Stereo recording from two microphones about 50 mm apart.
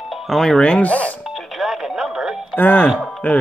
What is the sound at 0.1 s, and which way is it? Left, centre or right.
Music, centre.